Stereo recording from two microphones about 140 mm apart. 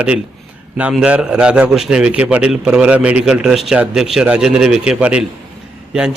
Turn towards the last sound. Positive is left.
turn(degrees=-5)  # may be behind; listen again after turning